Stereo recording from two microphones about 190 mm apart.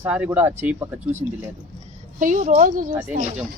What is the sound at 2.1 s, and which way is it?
Speech, 45° right (ahead or behind).